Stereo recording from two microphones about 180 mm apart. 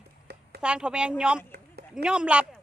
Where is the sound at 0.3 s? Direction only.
65° right (ahead or behind).